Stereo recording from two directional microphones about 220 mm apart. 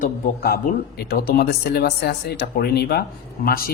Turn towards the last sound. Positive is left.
turn(degrees=40)  # may be behind; listen again after turning